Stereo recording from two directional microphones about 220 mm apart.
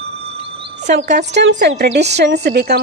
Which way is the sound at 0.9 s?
50° right (ahead or behind).